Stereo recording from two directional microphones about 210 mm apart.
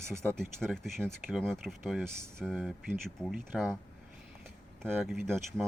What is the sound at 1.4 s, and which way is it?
Speech, centre (ahead or behind).